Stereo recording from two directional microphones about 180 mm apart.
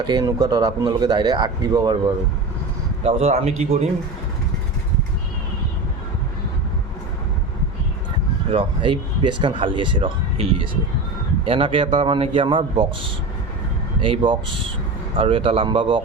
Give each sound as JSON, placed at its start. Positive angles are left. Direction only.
{"t": 0.0, "sound": "speech", "side_deg": -25}
{"t": 3.0, "sound": "a man's voice", "side_deg": -35}
{"t": 8.4, "sound": "speech", "side_deg": -30}